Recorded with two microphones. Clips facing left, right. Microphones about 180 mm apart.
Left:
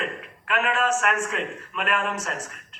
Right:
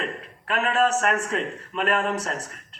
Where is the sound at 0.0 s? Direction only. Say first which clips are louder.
Even; 35° right (ahead or behind).